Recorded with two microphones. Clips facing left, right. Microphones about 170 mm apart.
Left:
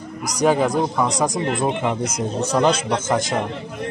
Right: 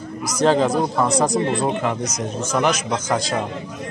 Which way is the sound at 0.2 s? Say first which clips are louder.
Right 1 dB; 15° left (ahead or behind).